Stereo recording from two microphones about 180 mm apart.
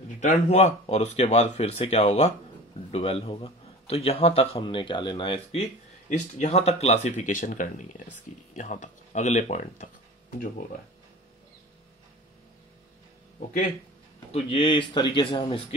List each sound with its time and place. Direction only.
0.2 s a man's voice: 40° left (ahead or behind)
14.3 s a man's voice: 30° left (ahead or behind)